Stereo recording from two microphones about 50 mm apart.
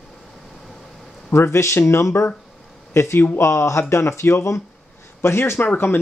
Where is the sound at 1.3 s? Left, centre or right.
Left.